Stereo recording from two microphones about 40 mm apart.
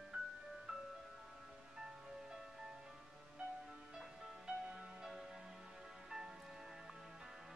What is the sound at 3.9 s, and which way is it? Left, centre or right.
Music, right.